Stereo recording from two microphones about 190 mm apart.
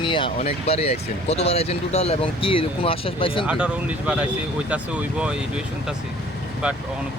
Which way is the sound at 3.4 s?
5° right (ahead or behind).